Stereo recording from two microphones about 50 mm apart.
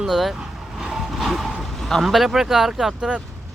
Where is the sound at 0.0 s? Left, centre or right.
Centre.